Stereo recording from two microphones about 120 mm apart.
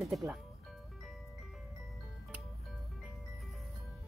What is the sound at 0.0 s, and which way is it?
Speech, centre (ahead or behind).